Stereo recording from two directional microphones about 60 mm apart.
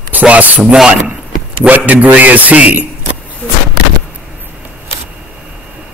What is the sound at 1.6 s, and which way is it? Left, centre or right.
A man's voice, right.